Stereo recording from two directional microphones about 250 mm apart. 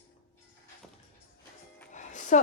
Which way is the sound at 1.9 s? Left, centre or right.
Left.